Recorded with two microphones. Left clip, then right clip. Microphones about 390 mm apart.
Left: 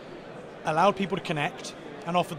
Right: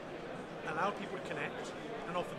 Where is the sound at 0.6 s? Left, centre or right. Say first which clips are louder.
Left 13 dB; left.